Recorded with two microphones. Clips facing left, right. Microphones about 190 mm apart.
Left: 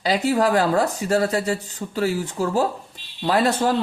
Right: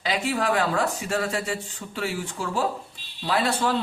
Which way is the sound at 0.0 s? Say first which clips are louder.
Left 6 dB; 40° left (ahead or behind).